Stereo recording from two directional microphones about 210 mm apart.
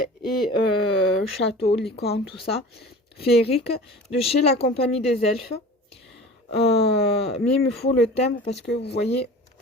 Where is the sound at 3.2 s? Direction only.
30° left (ahead or behind).